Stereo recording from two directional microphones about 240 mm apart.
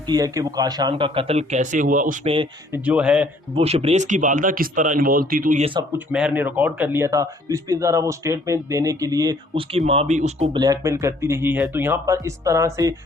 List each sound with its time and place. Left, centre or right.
0.1 s speech: centre; by 2.3 s right
2.7 s speech: centre
3.5 s speech: right
6.1 s speech: centre